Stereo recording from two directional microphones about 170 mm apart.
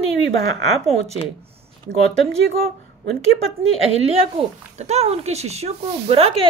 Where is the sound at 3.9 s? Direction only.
35° right (ahead or behind).